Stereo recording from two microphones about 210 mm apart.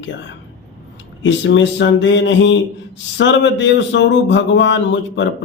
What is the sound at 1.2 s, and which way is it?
A man's voice, 60° left (ahead or behind).